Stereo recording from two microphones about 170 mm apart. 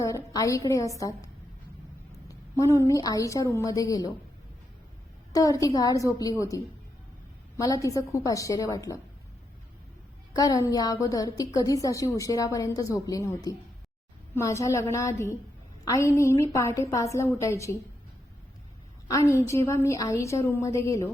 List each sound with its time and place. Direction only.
0.0 s a woman's voice: 20° left (ahead or behind)
5.3 s a woman's voice: 20° left (ahead or behind)
7.5 s a woman's voice: 20° left (ahead or behind)
10.3 s a woman's voice: 20° left (ahead or behind)
19.0 s a woman's voice: 20° left (ahead or behind)